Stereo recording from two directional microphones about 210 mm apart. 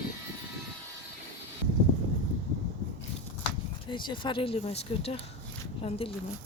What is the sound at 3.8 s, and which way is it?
Speech, 25° left (ahead or behind).